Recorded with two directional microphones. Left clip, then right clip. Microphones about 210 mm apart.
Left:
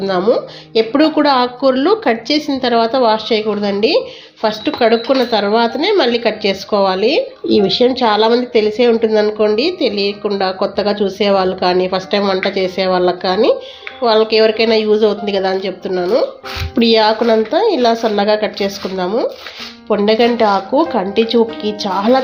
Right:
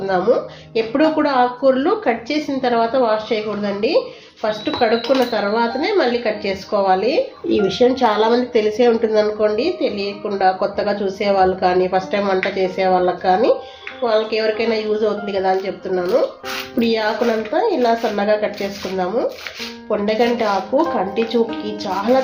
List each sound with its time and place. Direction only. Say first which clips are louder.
0.0 s speech: left 3 dB; 35° left (ahead or behind)